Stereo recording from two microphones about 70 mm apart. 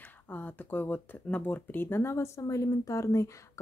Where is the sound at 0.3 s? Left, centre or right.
Left.